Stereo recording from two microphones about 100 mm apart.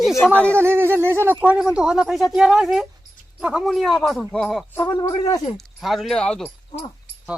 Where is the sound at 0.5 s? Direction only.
25° right (ahead or behind); by 4.6 s 5° left (ahead or behind).